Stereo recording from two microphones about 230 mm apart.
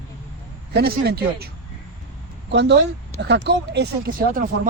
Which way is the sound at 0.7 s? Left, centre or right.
Right.